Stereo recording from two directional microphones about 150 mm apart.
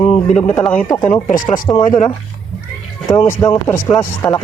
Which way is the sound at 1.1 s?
60° left (ahead or behind).